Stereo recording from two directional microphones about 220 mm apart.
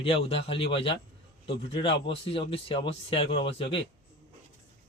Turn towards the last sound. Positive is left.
turn(degrees=25)  # may be behind; listen again after turning